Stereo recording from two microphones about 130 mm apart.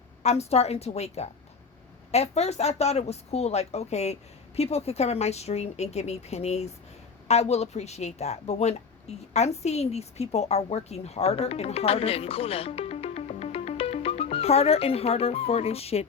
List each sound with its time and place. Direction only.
0.2 s a woman's voice: 55° left (ahead or behind)